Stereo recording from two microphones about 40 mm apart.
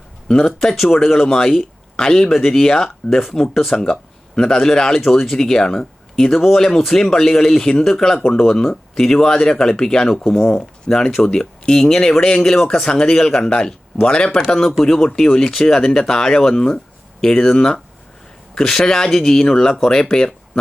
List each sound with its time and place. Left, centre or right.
0.3 s speech: centre
4.9 s speech: centre